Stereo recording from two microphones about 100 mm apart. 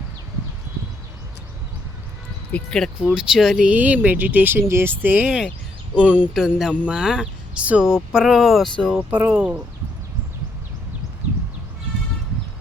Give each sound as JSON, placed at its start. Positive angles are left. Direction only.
{"t": 2.5, "sound": "speech", "side_deg": 10}
{"t": 3.0, "sound": "speech", "side_deg": -5}
{"t": 3.7, "sound": "speech", "side_deg": -15}
{"t": 9.0, "sound": "speech", "side_deg": -20}
{"t": 9.3, "sound": "speech", "side_deg": -10}